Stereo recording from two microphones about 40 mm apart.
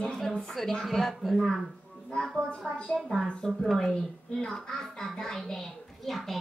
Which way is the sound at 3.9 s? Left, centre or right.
Centre.